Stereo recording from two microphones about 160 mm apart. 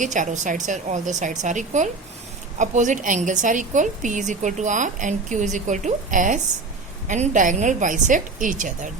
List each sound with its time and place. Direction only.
0.0 s a woman's voice: 50° right (ahead or behind)